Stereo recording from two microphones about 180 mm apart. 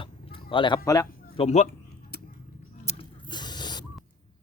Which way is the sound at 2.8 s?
30° left (ahead or behind).